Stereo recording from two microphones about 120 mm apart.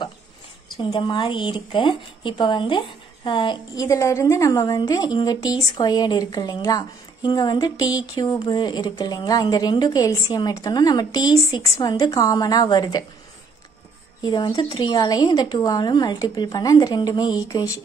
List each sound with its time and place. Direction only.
0.9 s a woman's voice: 40° left (ahead or behind)
3.7 s speech: 25° left (ahead or behind)
14.2 s speech: 35° left (ahead or behind)